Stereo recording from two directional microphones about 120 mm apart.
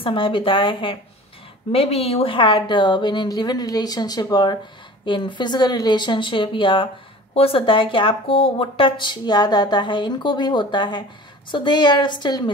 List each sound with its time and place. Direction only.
0.0 s a woman's voice: 45° left (ahead or behind)